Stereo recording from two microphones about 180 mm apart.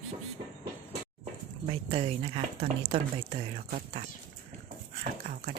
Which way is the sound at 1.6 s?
30° right (ahead or behind).